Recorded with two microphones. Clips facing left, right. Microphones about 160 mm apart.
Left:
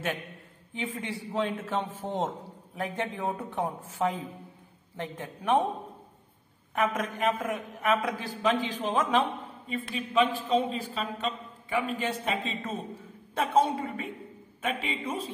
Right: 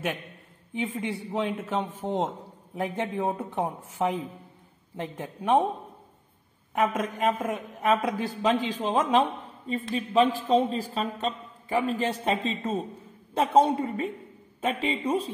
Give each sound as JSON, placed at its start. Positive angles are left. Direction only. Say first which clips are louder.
{"t": 0.7, "sound": "a man's voice", "louder": "right 4 dB", "side_deg": -20}
{"t": 2.7, "sound": "a man's voice", "louder": "right 3 dB", "side_deg": -25}
{"t": 6.7, "sound": "a woman's voice", "louder": "right 3 dB", "side_deg": -25}
{"t": 7.2, "sound": "a man's voice", "louder": "right 2 dB", "side_deg": -15}
{"t": 7.8, "sound": "a man's voice", "louder": "right 3 dB", "side_deg": -30}